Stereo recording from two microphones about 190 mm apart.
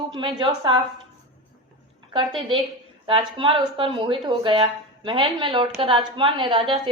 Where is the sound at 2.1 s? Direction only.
25° right (ahead or behind).